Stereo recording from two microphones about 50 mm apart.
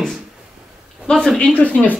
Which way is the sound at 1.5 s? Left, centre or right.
Left.